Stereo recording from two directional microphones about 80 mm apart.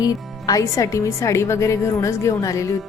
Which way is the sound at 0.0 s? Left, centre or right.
Left.